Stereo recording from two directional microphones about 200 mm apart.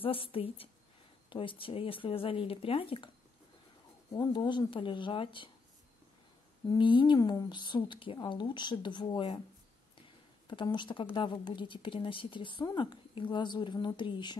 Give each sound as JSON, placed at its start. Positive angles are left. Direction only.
{"t": 0.0, "sound": "speech", "side_deg": 25}
{"t": 4.1, "sound": "speech", "side_deg": 20}
{"t": 6.6, "sound": "speech", "side_deg": 20}
{"t": 10.5, "sound": "speech", "side_deg": 25}